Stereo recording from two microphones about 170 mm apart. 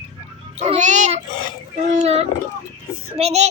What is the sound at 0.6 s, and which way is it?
A child's voice, 45° right (ahead or behind).